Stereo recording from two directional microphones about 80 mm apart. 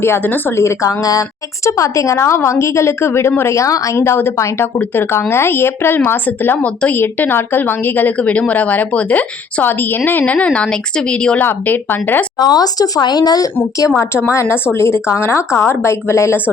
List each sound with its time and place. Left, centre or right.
0.0 s a woman's voice: left
12.4 s speech: left
13.9 s a woman's voice: left